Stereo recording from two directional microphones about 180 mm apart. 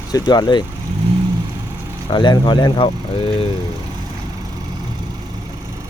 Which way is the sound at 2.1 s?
25° left (ahead or behind).